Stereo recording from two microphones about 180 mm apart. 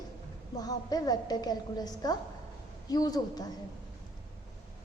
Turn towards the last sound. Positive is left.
turn(degrees=20)  # may be behind; listen again after turning